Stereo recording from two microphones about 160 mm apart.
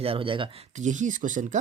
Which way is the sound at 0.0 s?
35° right (ahead or behind).